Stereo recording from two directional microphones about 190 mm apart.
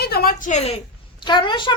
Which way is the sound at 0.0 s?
55° left (ahead or behind).